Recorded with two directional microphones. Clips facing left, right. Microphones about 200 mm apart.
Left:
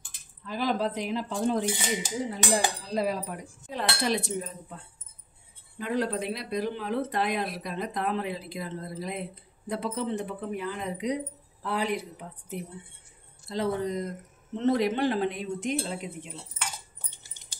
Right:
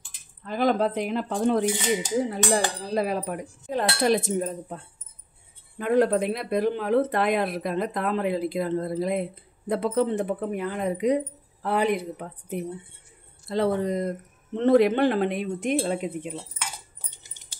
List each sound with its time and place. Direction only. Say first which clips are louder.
0.5 s speech: right 5 dB; 55° right (ahead or behind)
3.6 s cutlery: right 6 dB; 50° right (ahead or behind)
5.8 s speech: right 8 dB; 50° right (ahead or behind)